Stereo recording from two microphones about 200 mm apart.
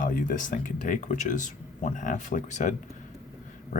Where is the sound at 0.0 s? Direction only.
40° left (ahead or behind).